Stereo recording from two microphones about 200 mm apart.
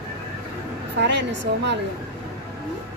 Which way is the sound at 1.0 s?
60° right (ahead or behind).